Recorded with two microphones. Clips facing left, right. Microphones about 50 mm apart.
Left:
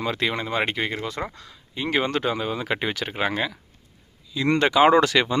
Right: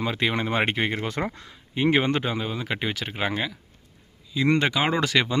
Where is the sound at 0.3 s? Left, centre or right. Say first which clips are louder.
Right 1 dB; right.